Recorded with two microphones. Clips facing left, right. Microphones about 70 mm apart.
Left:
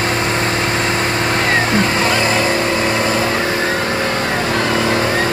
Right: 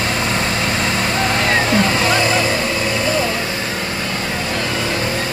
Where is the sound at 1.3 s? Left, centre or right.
Left.